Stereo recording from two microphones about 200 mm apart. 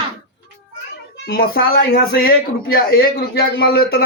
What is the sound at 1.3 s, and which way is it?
Speech, 50° left (ahead or behind).